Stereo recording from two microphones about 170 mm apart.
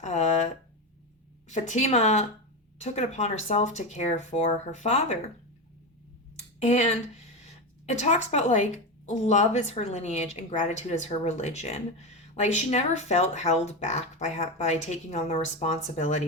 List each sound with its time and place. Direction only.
0.0 s a sound: 45° left (ahead or behind)
1.5 s a woman's voice: 45° left (ahead or behind)
6.6 s a woman's voice: 45° left (ahead or behind)